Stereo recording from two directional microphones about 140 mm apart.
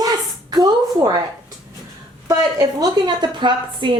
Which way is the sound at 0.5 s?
25° right (ahead or behind).